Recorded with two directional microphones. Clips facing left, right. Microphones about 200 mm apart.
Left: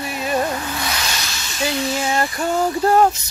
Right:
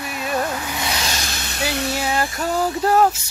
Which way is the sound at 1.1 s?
45° right (ahead or behind).